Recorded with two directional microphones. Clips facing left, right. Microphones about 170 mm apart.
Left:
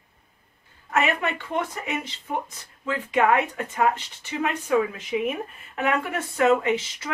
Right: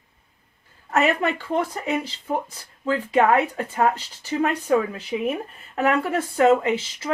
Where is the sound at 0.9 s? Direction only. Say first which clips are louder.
Right 3 dB; 35° right (ahead or behind).